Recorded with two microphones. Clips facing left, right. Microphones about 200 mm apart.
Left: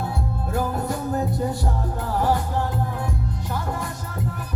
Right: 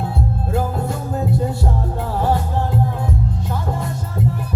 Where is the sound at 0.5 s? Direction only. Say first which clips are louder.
Right 1 dB; 25° right (ahead or behind).